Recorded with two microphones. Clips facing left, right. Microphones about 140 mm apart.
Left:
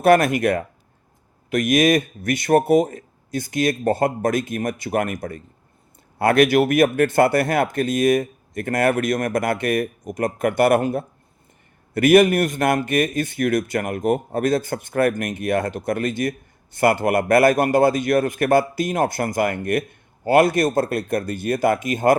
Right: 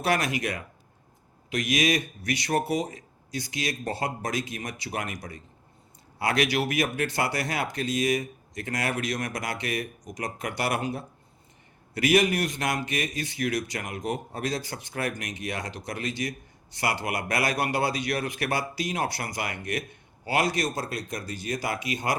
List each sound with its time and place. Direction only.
0.0 s a man's voice: 50° left (ahead or behind)